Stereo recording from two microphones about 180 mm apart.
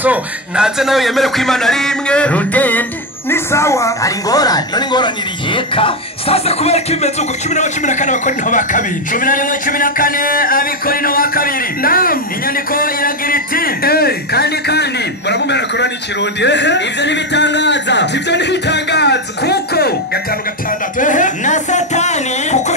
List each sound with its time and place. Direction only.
0.0 s a woman's voice: 5° right (ahead or behind); by 19.9 s 65° left (ahead or behind)
21.0 s speech: 45° left (ahead or behind)